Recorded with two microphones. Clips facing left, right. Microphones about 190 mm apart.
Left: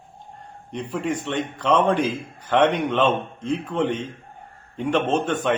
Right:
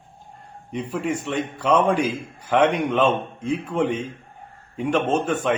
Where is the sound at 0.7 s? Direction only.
10° right (ahead or behind).